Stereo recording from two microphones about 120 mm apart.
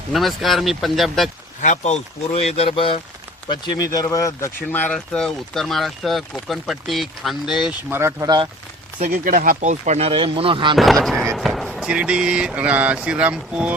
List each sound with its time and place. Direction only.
0.1 s speech: centre (ahead or behind)
1.6 s speech: 75° left (ahead or behind); by 3.0 s 50° left (ahead or behind)
3.5 s speech: 35° left (ahead or behind); by 4.9 s 15° left (ahead or behind)
4.9 s speech: 5° left (ahead or behind)
7.9 s speech: 20° right (ahead or behind)
9.6 s speech: 80° right
10.1 s speech: 50° right (ahead or behind)
10.8 s speech: centre (ahead or behind)